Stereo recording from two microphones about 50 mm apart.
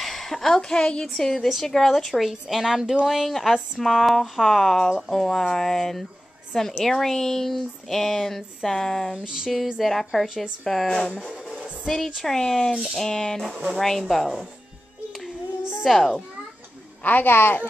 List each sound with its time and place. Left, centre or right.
0.0 s a woman's voice: centre
9.1 s a woman's voice: centre
9.8 s speech: centre
10.2 s a woman's voice: centre
10.6 s speech: centre
12.7 s a woman's voice: centre
13.0 s speech: centre
13.5 s speech: right
13.7 s speech: centre
15.8 s speech: centre
17.0 s a woman's voice: left